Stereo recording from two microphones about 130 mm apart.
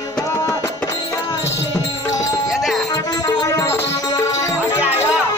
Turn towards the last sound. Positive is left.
turn(degrees=25)  # may be behind; listen again after turning